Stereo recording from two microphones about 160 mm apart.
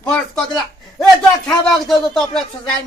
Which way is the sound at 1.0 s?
Centre (ahead or behind).